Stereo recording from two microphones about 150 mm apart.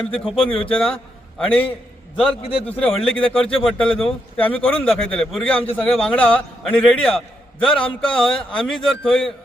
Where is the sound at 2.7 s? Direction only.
5° left (ahead or behind).